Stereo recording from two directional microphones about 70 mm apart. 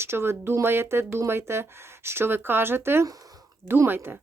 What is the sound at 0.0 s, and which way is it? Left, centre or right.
Speech, right.